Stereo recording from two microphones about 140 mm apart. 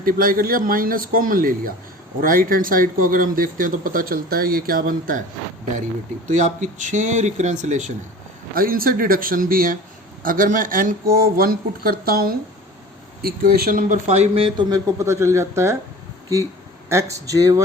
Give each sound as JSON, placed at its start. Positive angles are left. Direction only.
{"t": 0.0, "sound": "speech", "side_deg": -90}
{"t": 6.2, "sound": "speech", "side_deg": -60}
{"t": 8.5, "sound": "speech", "side_deg": -90}
{"t": 14.7, "sound": "speech", "side_deg": -25}
{"t": 16.9, "sound": "speech", "side_deg": -20}